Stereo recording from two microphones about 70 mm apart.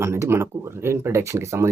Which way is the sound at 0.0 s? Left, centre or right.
Right.